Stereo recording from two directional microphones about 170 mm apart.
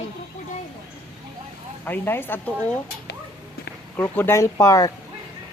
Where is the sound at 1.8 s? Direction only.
10° left (ahead or behind).